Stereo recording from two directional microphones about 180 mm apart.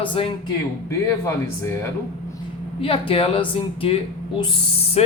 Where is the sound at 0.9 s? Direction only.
15° left (ahead or behind).